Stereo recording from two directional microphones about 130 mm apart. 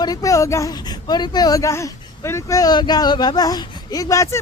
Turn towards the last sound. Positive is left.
turn(degrees=25)  # may be behind; listen again after turning